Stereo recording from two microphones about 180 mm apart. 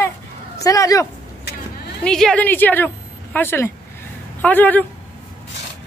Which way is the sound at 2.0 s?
5° left (ahead or behind).